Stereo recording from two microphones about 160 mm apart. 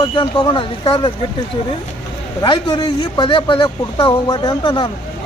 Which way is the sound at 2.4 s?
30° left (ahead or behind).